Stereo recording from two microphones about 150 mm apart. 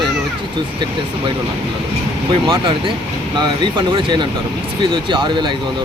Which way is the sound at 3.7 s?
30° right (ahead or behind).